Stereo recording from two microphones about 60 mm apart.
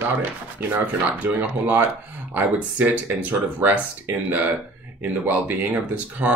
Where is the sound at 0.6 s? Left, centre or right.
Right.